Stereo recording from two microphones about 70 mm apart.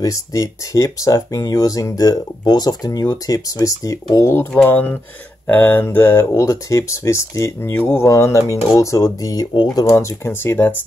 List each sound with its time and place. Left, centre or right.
0.0 s speech: left
5.5 s mantra: left
6.1 s speech: left
7.8 s speech: left
8.1 s speech: left
9.8 s speech: left